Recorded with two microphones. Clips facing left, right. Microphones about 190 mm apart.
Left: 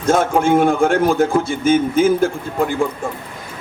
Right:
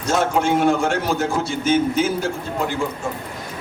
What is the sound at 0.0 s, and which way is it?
A man's voice, 55° left (ahead or behind).